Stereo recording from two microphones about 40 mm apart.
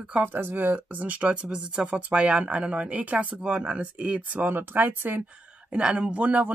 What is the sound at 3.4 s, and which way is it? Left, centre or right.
Speech, right.